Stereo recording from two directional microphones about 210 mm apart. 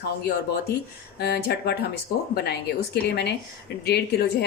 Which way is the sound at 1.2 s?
50° left (ahead or behind).